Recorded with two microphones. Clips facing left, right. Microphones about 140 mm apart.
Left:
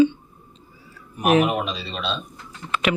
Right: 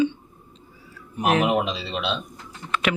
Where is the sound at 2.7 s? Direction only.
Centre (ahead or behind).